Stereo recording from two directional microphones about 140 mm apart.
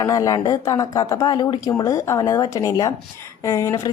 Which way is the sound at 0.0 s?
25° left (ahead or behind).